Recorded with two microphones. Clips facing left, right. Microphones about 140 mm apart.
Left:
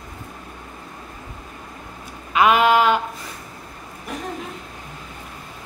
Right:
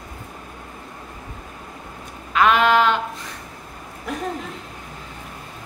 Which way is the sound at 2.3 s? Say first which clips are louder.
Left 1 dB; 10° left (ahead or behind).